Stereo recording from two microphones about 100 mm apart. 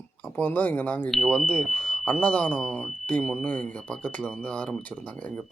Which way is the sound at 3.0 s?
15° left (ahead or behind).